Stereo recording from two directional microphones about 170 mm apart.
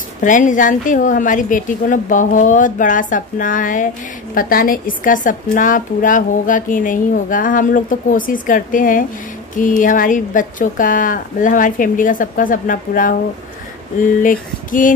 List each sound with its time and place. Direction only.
0.2 s a woman's voice: 50° left (ahead or behind)
14.2 s female singing: 50° left (ahead or behind)